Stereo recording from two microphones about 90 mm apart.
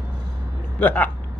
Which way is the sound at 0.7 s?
15° left (ahead or behind).